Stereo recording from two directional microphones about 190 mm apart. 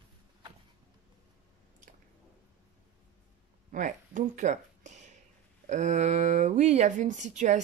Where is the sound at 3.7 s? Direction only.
40° right (ahead or behind).